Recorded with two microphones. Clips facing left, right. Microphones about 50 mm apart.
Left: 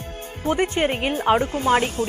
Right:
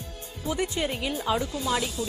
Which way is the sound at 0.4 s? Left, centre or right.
Left.